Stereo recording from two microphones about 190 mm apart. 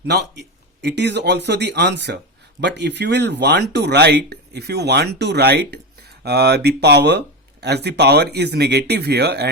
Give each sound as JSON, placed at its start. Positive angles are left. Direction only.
{"t": 0.0, "sound": "speech", "side_deg": -60}